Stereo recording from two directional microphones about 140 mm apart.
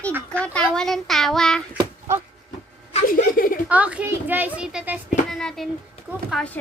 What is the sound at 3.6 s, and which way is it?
A child's voice, 10° right (ahead or behind).